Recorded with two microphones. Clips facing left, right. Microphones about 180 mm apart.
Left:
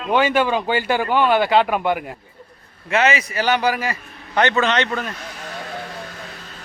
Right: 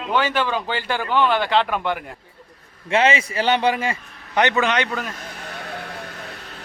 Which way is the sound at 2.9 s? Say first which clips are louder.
Even; 30° right (ahead or behind).